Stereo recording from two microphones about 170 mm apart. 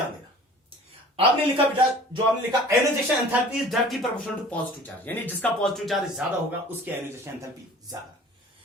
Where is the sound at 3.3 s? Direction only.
Centre (ahead or behind).